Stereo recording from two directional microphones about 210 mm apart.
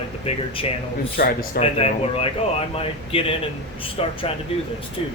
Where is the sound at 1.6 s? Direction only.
30° left (ahead or behind).